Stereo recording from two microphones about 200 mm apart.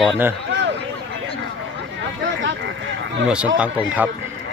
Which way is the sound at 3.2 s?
5° right (ahead or behind).